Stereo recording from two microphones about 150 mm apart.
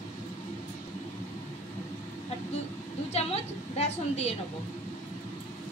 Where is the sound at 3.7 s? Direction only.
45° left (ahead or behind).